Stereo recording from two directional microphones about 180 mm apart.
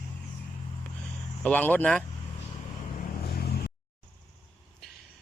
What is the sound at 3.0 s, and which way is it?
Vehicle, 55° left (ahead or behind).